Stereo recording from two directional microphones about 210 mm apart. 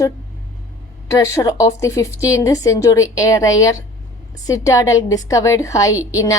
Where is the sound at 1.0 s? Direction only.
15° left (ahead or behind).